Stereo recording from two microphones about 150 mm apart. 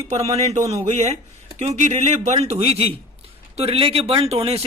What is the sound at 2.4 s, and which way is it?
Speech, 45° right (ahead or behind).